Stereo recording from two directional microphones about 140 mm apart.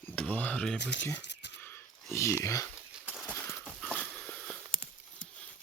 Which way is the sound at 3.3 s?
15° left (ahead or behind).